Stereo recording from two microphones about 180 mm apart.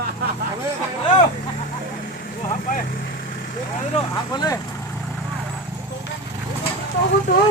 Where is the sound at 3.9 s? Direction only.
25° left (ahead or behind).